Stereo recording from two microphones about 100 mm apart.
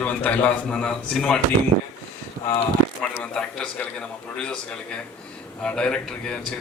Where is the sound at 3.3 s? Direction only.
10° left (ahead or behind).